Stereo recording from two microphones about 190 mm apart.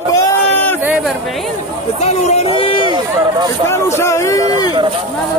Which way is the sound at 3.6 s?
15° left (ahead or behind).